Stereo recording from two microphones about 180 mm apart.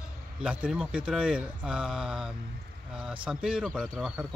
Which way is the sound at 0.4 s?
5° right (ahead or behind).